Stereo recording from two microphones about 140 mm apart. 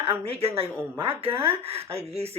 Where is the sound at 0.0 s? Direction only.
45° right (ahead or behind).